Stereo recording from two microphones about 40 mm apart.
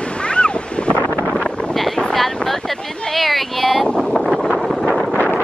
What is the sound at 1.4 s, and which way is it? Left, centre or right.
Wind noise, left.